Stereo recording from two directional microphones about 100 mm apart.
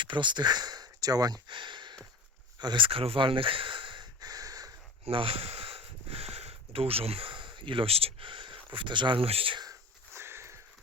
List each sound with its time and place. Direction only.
0.0 s speech: 50° right (ahead or behind)
4.2 s crow: 40° right (ahead or behind)
5.0 s speech: 65° right (ahead or behind)
10.2 s sniff: 25° right (ahead or behind)